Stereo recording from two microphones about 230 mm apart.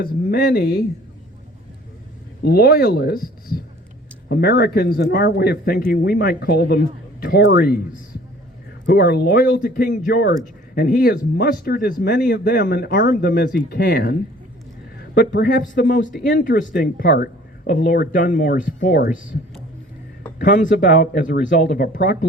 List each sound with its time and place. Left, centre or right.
0.0 s speech: left
2.5 s speech: left
8.9 s speech: left
20.4 s speech: left